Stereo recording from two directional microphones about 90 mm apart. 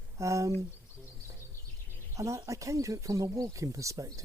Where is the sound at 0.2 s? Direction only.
35° right (ahead or behind).